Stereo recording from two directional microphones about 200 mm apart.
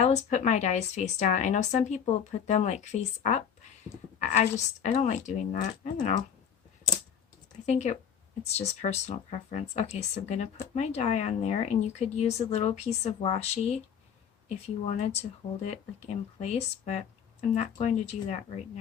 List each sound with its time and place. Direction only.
0.0 s speech: 35° left (ahead or behind)
7.7 s speech: 35° left (ahead or behind)
14.8 s speech: 35° left (ahead or behind)